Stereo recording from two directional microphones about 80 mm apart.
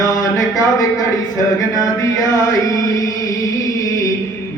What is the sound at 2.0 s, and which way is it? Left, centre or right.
Mantra, left.